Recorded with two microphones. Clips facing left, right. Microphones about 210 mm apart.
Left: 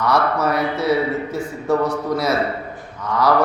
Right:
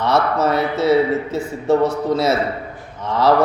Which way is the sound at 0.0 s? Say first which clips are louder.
Right 1 dB; 25° right (ahead or behind).